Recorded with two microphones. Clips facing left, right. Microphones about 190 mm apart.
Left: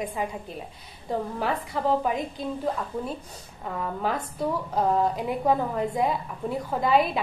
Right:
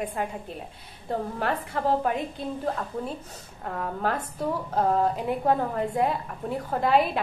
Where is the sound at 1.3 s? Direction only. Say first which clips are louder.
Even; centre (ahead or behind).